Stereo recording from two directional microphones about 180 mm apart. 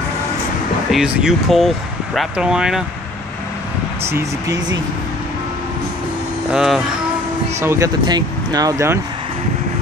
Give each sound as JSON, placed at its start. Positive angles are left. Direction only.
{"t": 0.9, "sound": "speech", "side_deg": 0}
{"t": 6.5, "sound": "speech", "side_deg": 0}
{"t": 7.6, "sound": "speech", "side_deg": -15}